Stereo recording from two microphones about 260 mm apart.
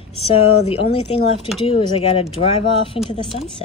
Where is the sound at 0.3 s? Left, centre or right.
Left.